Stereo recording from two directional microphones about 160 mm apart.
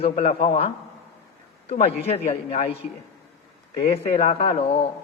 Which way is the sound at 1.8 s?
40° left (ahead or behind).